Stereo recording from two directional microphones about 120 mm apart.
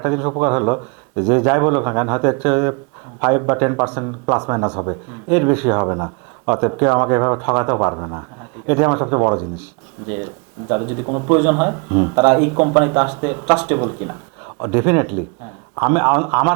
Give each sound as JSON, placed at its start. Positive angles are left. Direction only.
{"t": 0.0, "sound": "speech", "side_deg": -25}
{"t": 10.7, "sound": "speech", "side_deg": -25}